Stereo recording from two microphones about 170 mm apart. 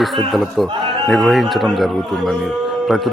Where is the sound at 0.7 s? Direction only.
30° right (ahead or behind).